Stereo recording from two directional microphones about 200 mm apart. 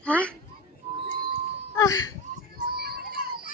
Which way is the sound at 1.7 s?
20° left (ahead or behind).